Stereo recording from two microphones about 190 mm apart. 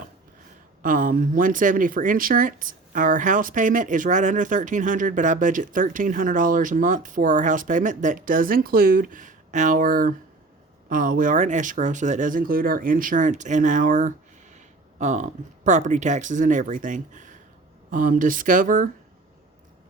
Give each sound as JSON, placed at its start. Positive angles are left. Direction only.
{"t": 0.8, "sound": "speech", "side_deg": -45}